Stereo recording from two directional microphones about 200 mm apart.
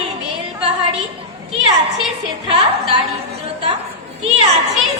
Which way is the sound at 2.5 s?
30° right (ahead or behind).